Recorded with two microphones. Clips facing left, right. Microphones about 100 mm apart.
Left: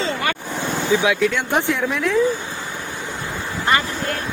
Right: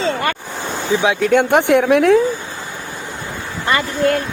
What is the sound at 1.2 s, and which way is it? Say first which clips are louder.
Speech: right 6 dB; 50° right (ahead or behind).